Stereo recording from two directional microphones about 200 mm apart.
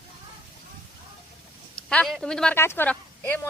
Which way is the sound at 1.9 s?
5° left (ahead or behind).